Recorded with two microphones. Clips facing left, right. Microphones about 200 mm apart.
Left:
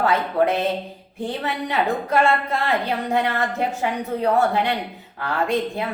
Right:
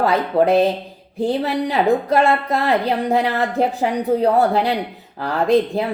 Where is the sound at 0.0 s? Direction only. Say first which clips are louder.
Right 3 dB; 35° right (ahead or behind).